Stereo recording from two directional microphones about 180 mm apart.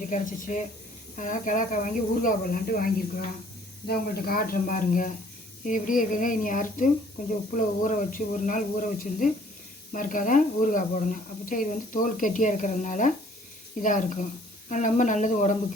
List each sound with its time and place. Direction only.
0.0 s speech: 45° left (ahead or behind)
9.9 s speech: 45° left (ahead or behind)